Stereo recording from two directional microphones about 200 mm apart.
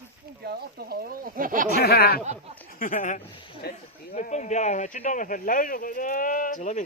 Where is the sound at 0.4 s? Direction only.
50° right (ahead or behind).